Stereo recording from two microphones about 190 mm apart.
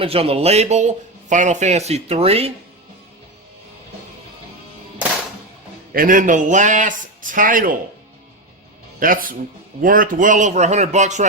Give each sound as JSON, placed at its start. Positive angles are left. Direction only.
{"t": 0.0, "sound": "speech", "side_deg": -30}
{"t": 5.9, "sound": "a man's voice", "side_deg": -50}
{"t": 9.0, "sound": "speech", "side_deg": -45}